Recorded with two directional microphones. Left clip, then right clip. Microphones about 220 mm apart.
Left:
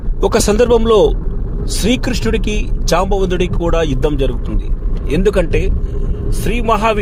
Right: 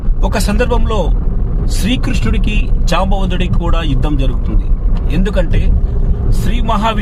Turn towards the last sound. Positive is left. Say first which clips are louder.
# left 2 dB
turn(degrees=25)  # may be behind; listen again after turning